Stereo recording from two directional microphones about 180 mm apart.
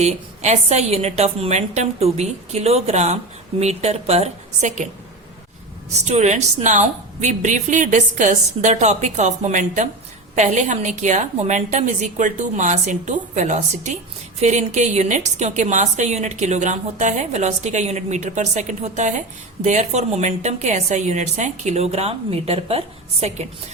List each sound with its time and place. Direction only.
0.0 s a woman's voice: 40° right (ahead or behind)
5.9 s a woman's voice: 40° right (ahead or behind)